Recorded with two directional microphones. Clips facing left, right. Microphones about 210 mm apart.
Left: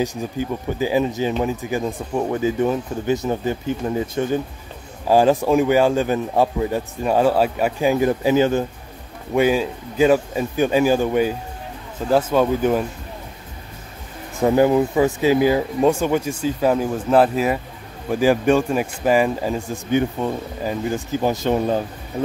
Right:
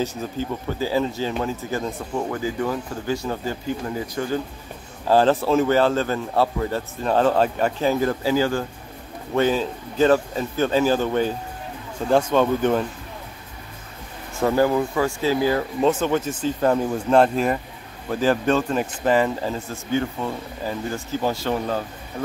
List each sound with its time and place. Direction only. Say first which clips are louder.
0.0 s speech: left 3 dB; 15° left (ahead or behind)
5.0 s speech: left 2 dB; 10° left (ahead or behind)
14.4 s speech: left 4 dB; 20° left (ahead or behind)